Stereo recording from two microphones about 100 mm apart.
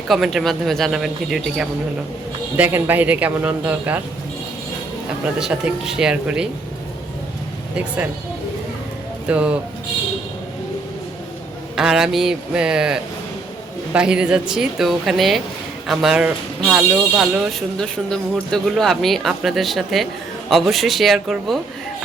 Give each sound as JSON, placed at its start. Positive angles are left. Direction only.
{"t": 0.1, "sound": "speech", "side_deg": 0}
{"t": 2.6, "sound": "a woman's voice", "side_deg": -20}
{"t": 5.4, "sound": "a woman's voice", "side_deg": -5}
{"t": 9.2, "sound": "a woman's voice", "side_deg": -10}
{"t": 11.8, "sound": "a woman's voice", "side_deg": -5}
{"t": 17.7, "sound": "speech", "side_deg": 5}